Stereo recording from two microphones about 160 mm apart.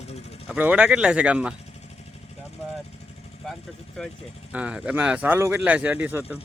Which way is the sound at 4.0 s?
Centre (ahead or behind).